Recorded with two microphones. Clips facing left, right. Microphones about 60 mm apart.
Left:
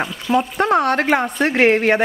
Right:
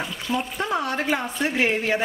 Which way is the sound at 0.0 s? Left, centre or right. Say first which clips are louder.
Left 8 dB; left.